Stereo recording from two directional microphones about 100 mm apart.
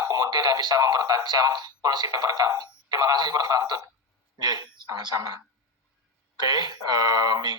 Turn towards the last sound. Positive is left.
turn(degrees=-40)  # may be behind; listen again after turning